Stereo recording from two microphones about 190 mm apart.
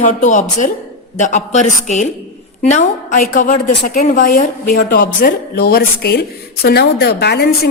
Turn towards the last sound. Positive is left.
turn(degrees=60)  # may be behind; listen again after turning